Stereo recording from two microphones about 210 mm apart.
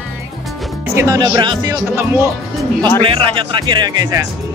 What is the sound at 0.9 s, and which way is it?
Speech, 15° right (ahead or behind).